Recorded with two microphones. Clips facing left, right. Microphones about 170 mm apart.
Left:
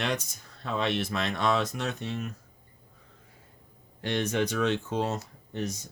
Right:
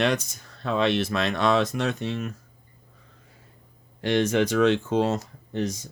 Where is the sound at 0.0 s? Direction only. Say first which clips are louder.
Right 7 dB; 85° right.